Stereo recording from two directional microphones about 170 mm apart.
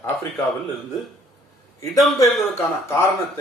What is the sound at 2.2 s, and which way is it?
Speech, 15° left (ahead or behind).